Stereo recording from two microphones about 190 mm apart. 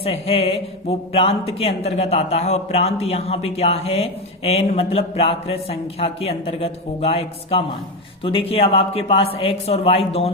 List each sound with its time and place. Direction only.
0.0 s a man's voice: 30° left (ahead or behind)